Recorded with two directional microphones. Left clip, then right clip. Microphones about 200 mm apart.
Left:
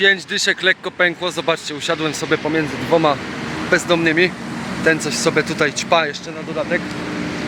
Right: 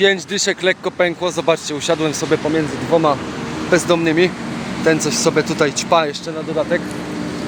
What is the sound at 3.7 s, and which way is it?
Speech, 10° right (ahead or behind).